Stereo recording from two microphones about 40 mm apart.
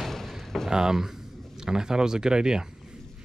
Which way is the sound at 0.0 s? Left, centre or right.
Centre.